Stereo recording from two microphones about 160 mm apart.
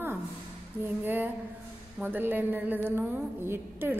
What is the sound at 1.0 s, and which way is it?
A woman's voice, 10° right (ahead or behind).